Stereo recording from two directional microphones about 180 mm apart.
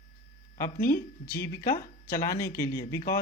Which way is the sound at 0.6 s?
15° left (ahead or behind).